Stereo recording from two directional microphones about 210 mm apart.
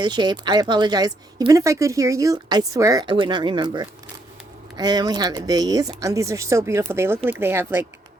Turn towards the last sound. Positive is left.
turn(degrees=-10)  # may be behind; listen again after turning